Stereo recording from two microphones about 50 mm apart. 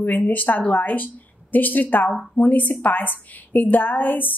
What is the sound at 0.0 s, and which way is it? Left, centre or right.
A woman's voice, left.